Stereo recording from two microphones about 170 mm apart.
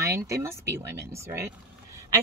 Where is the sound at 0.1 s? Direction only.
15° right (ahead or behind).